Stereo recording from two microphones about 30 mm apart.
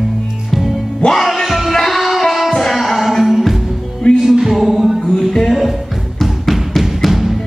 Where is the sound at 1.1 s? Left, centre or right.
Centre.